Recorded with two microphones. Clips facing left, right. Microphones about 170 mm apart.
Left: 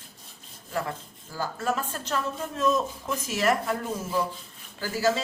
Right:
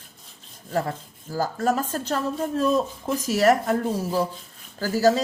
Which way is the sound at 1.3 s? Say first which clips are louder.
Right 6 dB; 40° right (ahead or behind).